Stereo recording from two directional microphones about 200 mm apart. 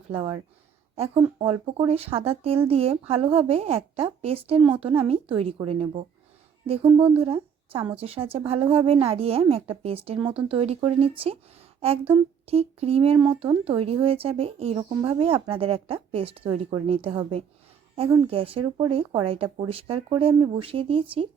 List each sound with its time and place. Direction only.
0.1 s speech: 30° right (ahead or behind)